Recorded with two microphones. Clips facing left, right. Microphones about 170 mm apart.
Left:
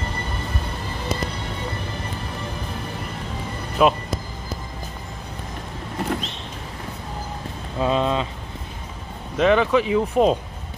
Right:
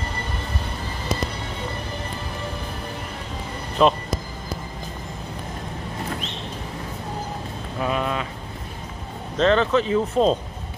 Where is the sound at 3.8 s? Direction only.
5° left (ahead or behind).